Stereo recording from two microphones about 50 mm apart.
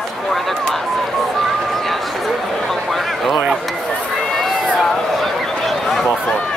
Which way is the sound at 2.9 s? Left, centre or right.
Centre.